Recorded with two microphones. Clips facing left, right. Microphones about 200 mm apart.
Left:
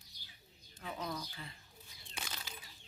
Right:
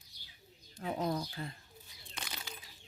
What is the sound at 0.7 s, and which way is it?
Speech, 40° right (ahead or behind).